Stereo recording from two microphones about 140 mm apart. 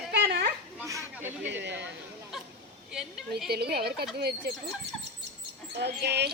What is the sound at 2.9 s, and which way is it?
Speech, 5° right (ahead or behind).